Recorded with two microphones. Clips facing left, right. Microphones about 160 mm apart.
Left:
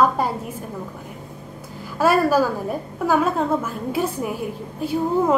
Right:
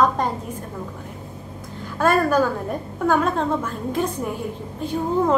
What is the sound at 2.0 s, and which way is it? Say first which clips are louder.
A woman's voice: left 1 dB; 5° left (ahead or behind).